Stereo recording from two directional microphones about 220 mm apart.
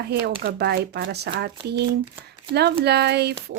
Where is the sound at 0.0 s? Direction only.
50° right (ahead or behind).